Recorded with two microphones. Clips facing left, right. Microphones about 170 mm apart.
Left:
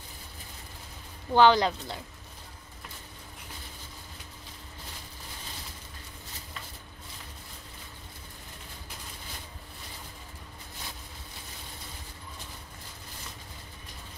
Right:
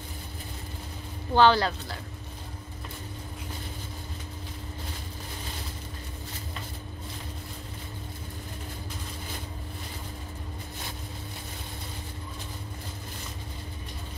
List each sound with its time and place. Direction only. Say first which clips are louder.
1.3 s speech: even; 15° left (ahead or behind)